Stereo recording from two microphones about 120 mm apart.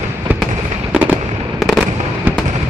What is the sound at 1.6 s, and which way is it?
Fireworks, centre (ahead or behind).